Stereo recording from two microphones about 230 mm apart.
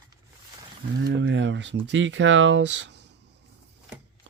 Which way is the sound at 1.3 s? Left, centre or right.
Right.